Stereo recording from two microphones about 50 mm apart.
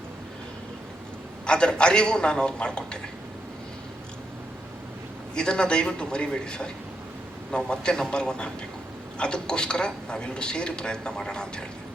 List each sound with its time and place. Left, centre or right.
1.5 s speech: centre
5.3 s speech: centre